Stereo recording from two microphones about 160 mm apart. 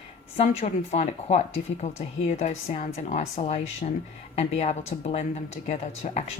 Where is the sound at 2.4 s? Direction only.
45° left (ahead or behind).